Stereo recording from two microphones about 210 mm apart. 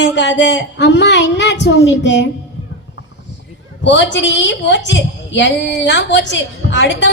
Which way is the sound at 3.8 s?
60° left (ahead or behind).